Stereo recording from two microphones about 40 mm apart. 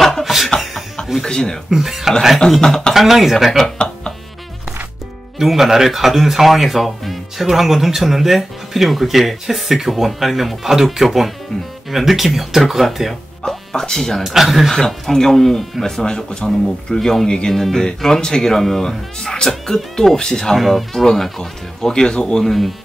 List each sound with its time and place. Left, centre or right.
0.2 s chuckle: centre
1.2 s a sound: centre
1.7 s a sound: centre
2.6 s speech: centre
2.9 s speech: centre
3.7 s a sound: left
5.4 s speech: centre
13.5 s speech: centre
14.2 s speech: centre
14.7 s speech: centre
20.5 s speech: centre
20.9 s speech: centre
22.4 s speech: centre